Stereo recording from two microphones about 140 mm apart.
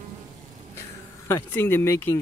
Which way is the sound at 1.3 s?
15° left (ahead or behind).